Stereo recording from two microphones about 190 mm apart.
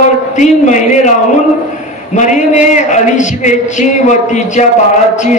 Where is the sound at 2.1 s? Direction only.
40° left (ahead or behind).